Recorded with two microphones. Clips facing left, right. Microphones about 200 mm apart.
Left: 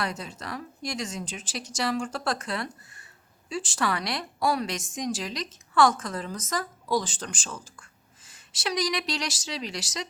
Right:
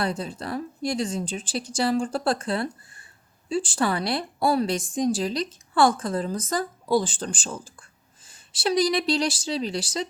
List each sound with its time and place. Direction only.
0.0 s a woman's voice: 30° right (ahead or behind)